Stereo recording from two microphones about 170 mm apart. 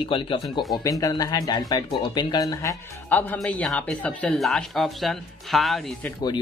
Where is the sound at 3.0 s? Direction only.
10° left (ahead or behind).